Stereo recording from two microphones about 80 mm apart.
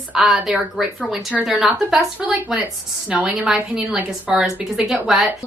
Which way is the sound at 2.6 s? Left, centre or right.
Right.